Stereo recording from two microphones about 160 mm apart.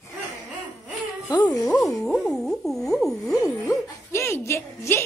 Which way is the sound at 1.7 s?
5° left (ahead or behind).